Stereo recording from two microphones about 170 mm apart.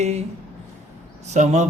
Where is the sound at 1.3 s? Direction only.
45° right (ahead or behind).